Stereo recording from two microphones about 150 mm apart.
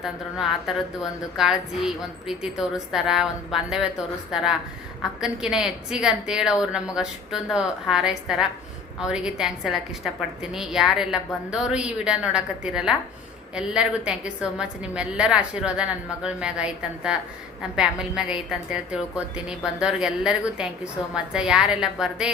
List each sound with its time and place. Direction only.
1.4 s a woman's voice: 5° right (ahead or behind)